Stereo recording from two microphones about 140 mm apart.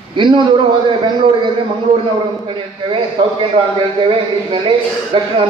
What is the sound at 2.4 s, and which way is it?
A man's voice, 35° right (ahead or behind).